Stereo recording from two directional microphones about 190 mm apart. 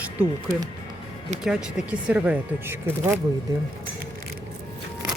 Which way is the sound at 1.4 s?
5° right (ahead or behind).